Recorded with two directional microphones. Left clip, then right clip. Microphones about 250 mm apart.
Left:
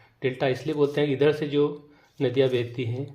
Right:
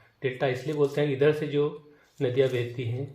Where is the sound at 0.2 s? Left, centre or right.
Left.